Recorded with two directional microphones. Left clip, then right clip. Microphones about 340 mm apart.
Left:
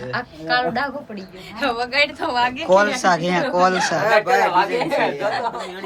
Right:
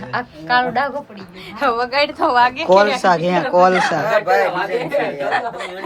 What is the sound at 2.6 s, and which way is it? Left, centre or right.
Speech, centre.